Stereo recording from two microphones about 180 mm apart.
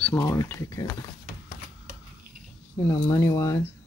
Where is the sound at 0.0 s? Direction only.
15° left (ahead or behind).